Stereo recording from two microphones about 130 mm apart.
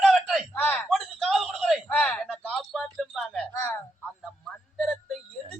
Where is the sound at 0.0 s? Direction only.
Centre (ahead or behind).